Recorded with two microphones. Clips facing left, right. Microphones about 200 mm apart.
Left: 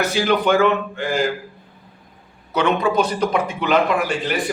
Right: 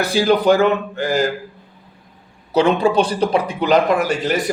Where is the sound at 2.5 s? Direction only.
30° right (ahead or behind).